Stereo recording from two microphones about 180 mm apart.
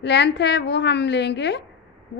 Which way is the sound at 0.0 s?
75° left (ahead or behind).